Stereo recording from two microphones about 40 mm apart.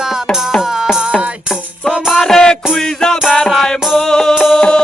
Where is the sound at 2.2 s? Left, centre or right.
Centre.